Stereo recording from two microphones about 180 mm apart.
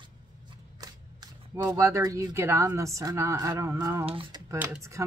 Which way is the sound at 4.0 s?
30° right (ahead or behind).